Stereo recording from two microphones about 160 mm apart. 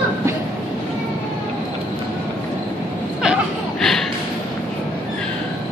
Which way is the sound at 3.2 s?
Centre (ahead or behind).